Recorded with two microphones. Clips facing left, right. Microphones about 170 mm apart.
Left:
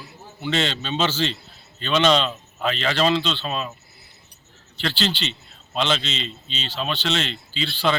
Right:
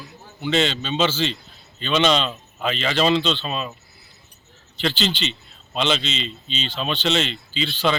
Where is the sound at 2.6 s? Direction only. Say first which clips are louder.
Right 1 dB; 10° right (ahead or behind).